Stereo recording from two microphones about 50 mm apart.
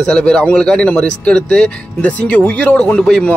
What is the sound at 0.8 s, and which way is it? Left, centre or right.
Speech, left.